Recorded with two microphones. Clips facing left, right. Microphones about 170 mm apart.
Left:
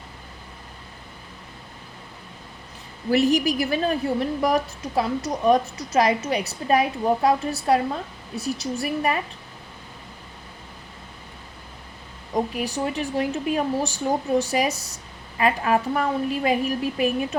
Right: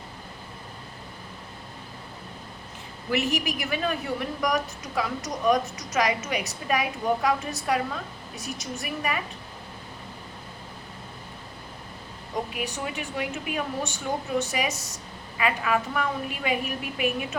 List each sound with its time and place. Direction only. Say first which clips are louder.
3.1 s a woman's voice: left 7 dB; 35° left (ahead or behind)
12.5 s a woman's voice: left 6 dB; 35° left (ahead or behind)